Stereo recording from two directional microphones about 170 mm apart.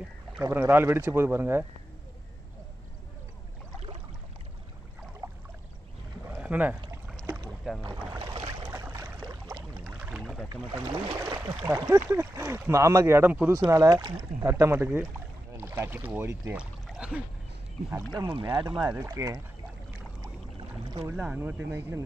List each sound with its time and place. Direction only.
0.4 s speech: 15° right (ahead or behind)
6.2 s boat: 10° right (ahead or behind)
7.8 s boat: 20° right (ahead or behind)
8.6 s boat: 10° right (ahead or behind)
9.8 s rowboat: 5° right (ahead or behind)
10.5 s speech: 20° right (ahead or behind)
16.4 s pour: 5° right (ahead or behind)
18.1 s speech: 25° right (ahead or behind)
18.8 s speech: 10° right (ahead or behind)
21.2 s speech: 10° right (ahead or behind)